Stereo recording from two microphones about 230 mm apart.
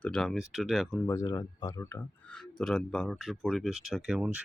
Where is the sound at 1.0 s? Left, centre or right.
Centre.